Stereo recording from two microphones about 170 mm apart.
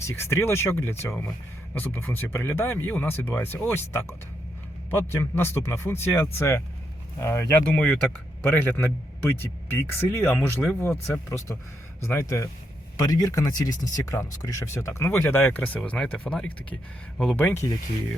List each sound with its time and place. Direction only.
0.1 s speech: 15° left (ahead or behind)